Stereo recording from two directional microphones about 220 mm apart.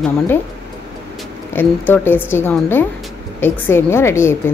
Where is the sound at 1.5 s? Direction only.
10° left (ahead or behind).